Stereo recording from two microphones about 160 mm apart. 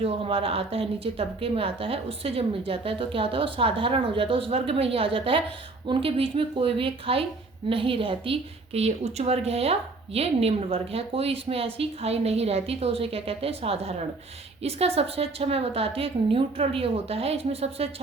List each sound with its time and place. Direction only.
0.0 s a woman's voice: 35° right (ahead or behind)